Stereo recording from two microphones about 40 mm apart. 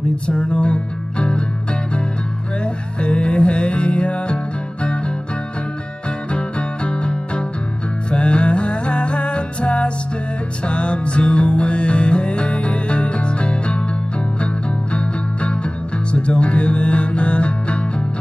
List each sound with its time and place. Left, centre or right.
0.3 s music: left
2.6 s music: left
6.3 s music: left